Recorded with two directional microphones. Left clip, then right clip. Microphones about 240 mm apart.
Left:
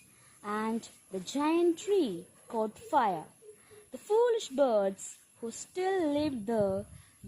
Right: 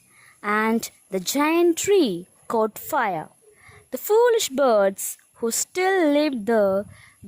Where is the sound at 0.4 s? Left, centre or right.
Right.